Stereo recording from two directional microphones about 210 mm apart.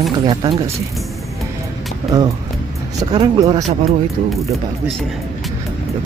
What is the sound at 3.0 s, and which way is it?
Speech, 20° right (ahead or behind).